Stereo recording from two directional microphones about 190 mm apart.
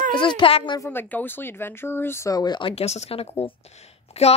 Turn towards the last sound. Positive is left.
turn(degrees=35)  # may be behind; listen again after turning